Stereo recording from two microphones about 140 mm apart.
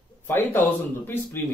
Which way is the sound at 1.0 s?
15° left (ahead or behind).